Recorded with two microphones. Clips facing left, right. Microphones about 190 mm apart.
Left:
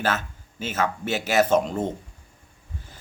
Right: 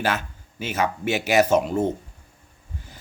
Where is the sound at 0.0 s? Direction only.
15° right (ahead or behind).